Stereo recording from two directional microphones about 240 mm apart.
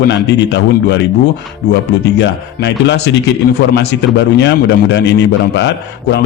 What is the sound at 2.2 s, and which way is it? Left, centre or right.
A man's voice, left.